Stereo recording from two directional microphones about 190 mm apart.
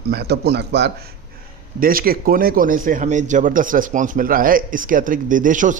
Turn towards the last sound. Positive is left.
turn(degrees=-45)  # may be behind; listen again after turning